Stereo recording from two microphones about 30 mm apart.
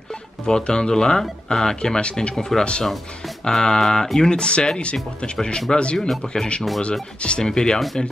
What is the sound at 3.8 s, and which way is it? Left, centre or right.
Speech, left.